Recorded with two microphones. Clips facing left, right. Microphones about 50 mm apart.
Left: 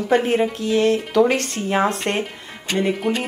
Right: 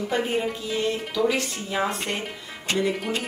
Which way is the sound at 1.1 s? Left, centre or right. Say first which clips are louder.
Left 7 dB; left.